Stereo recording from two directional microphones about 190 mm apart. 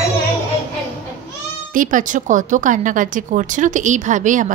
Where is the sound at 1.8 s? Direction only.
45° right (ahead or behind).